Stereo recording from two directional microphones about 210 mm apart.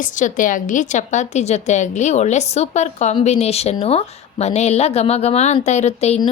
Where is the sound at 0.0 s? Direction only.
35° left (ahead or behind).